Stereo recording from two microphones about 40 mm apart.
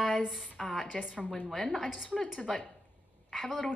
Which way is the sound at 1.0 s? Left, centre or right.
Right.